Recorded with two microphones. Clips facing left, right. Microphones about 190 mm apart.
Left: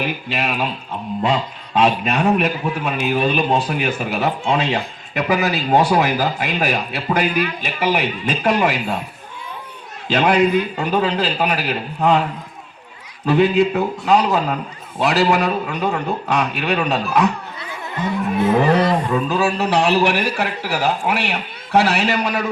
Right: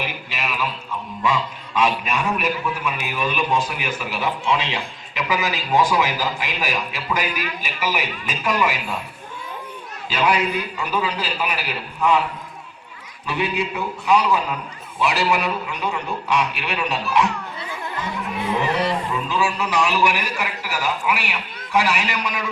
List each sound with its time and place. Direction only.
0.0 s a man's voice: 55° left (ahead or behind)
3.1 s speech: 60° left (ahead or behind)
3.9 s speech: 50° left (ahead or behind)
10.2 s a man's voice: 55° left (ahead or behind)
13.2 s a man's voice: 55° left (ahead or behind)
18.4 s a man's voice: 45° left (ahead or behind)